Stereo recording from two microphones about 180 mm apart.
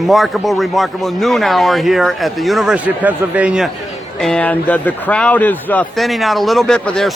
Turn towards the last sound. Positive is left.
turn(degrees=5)  # may be behind; listen again after turning